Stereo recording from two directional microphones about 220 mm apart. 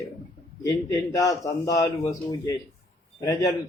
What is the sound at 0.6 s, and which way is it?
Speech, 15° left (ahead or behind).